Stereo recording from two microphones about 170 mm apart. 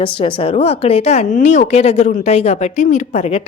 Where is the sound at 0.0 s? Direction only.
30° left (ahead or behind).